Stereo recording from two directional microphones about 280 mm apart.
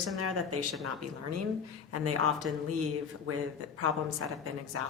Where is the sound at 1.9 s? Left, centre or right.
Right.